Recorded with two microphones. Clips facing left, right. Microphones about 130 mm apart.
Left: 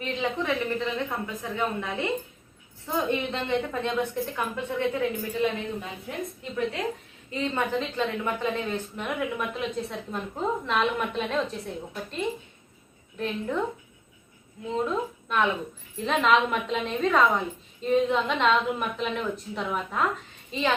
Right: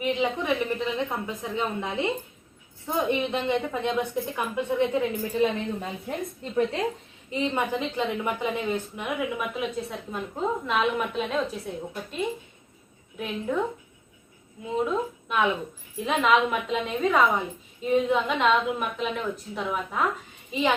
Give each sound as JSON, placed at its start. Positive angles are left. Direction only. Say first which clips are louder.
{"t": 0.0, "sound": "a woman's voice", "louder": "right 3 dB", "side_deg": -15}
{"t": 7.3, "sound": "a woman's voice", "louder": "right 1 dB", "side_deg": -15}
{"t": 8.6, "sound": "a woman's voice", "louder": "right 2 dB", "side_deg": 0}
{"t": 14.7, "sound": "a woman's voice", "louder": "right 1 dB", "side_deg": -5}
{"t": 20.5, "sound": "a woman's voice", "louder": "right 2 dB", "side_deg": -15}